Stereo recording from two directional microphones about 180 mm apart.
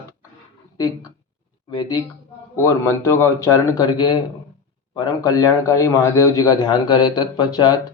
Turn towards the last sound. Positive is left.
turn(degrees=25)  # may be behind; listen again after turning